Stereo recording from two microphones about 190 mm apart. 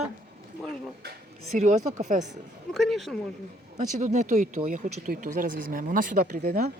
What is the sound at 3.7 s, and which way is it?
Speech, 40° right (ahead or behind).